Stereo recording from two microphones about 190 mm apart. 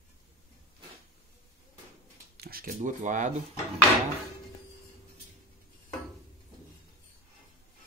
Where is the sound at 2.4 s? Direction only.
50° right (ahead or behind).